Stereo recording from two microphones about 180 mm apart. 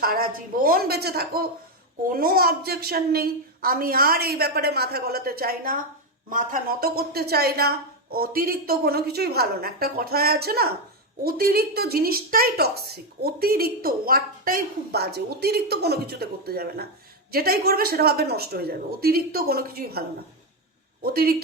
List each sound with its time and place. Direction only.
0.0 s a woman's voice: 55° right (ahead or behind)